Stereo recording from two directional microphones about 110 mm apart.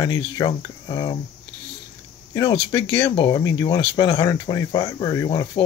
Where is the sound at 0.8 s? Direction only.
55° left (ahead or behind).